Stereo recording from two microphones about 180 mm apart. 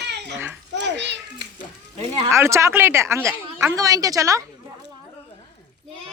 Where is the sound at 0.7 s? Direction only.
75° right (ahead or behind).